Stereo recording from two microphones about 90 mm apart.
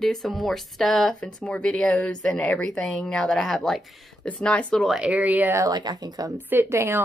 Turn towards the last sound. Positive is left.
turn(degrees=-30)  # may be behind; listen again after turning